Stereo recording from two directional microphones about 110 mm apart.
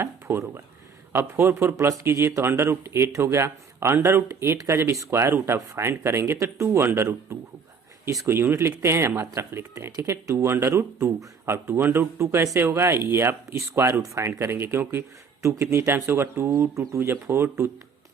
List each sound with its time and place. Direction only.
0.0 s speech: 25° right (ahead or behind)